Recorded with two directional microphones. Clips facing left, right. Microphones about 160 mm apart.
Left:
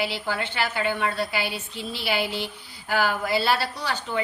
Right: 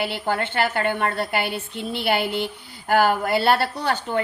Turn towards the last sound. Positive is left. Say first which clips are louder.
# right 4 dB
turn(degrees=-55)  # may be behind; listen again after turning